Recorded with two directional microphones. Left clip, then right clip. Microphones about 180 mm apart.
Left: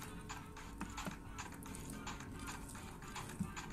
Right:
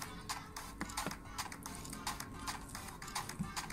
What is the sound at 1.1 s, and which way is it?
Clip-clop, 35° right (ahead or behind).